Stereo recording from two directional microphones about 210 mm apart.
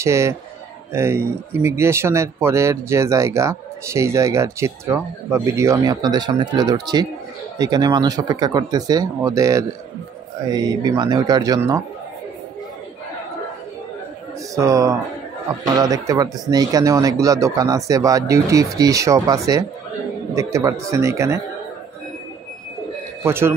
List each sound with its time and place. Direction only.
0.0 s speech: 15° right (ahead or behind)
14.5 s speech: 15° right (ahead or behind)
20.8 s speech: 15° right (ahead or behind)
23.2 s speech: 10° right (ahead or behind)